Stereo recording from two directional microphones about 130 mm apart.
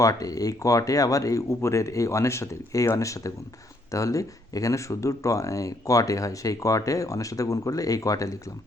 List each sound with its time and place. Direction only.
0.0 s speech: 25° left (ahead or behind)